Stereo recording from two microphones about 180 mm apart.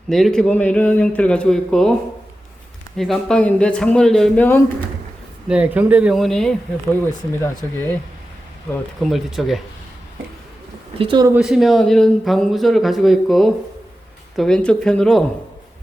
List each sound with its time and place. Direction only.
0.1 s speech: centre (ahead or behind)
3.0 s speech: 5° left (ahead or behind)
5.5 s speech: 10° right (ahead or behind); by 7.9 s 10° left (ahead or behind)
9.0 s speech: centre (ahead or behind)
10.9 s speech: 30° right (ahead or behind)
11.3 s speech: 5° right (ahead or behind)